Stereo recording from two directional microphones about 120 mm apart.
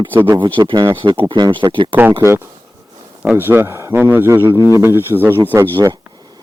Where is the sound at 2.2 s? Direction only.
20° right (ahead or behind).